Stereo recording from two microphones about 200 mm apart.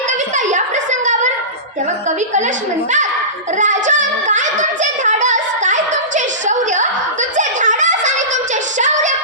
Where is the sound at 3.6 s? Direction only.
40° right (ahead or behind).